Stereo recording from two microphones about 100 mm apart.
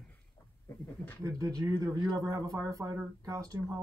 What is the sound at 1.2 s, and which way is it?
Speech, 35° right (ahead or behind).